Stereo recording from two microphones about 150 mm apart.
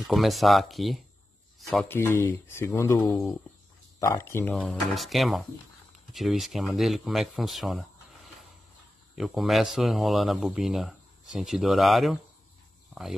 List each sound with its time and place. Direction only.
0.0 s speech: centre (ahead or behind)
1.9 s speech: 15° left (ahead or behind)
4.6 s speech: centre (ahead or behind)
9.1 s speech: centre (ahead or behind)